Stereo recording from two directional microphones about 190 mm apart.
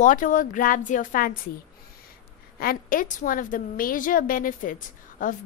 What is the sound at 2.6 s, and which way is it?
A woman's voice, 50° left (ahead or behind).